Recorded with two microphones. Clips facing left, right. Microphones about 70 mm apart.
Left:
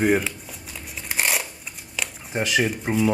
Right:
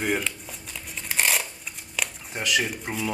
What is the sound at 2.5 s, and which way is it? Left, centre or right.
Speech, centre.